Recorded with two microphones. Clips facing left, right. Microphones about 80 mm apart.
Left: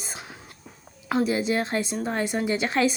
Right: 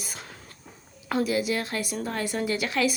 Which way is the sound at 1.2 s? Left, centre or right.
Left.